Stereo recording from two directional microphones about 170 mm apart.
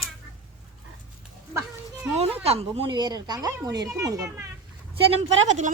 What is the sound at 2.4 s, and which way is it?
Speech, 35° right (ahead or behind).